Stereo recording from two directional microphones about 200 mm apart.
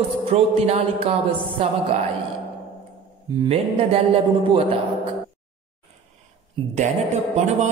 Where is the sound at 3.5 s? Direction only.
30° right (ahead or behind).